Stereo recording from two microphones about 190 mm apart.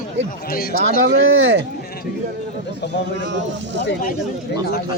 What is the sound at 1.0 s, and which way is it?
Speech, 75° right (ahead or behind).